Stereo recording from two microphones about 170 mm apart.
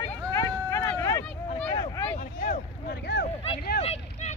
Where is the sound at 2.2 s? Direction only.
50° left (ahead or behind).